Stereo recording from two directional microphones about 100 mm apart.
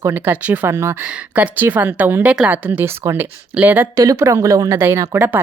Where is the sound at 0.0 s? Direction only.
20° right (ahead or behind).